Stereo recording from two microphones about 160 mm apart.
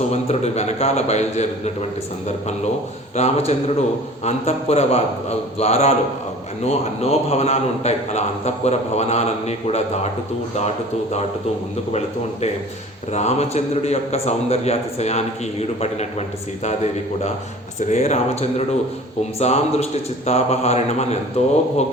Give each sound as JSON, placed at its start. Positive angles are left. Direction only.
{"t": 0.1, "sound": "a man's voice", "side_deg": 45}
{"t": 3.2, "sound": "a man's voice", "side_deg": 40}
{"t": 11.9, "sound": "a man's voice", "side_deg": 40}